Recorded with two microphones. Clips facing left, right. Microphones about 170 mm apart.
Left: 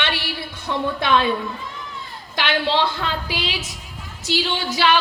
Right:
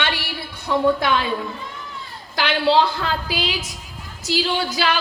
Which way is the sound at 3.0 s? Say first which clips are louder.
Right 2 dB; 25° left (ahead or behind).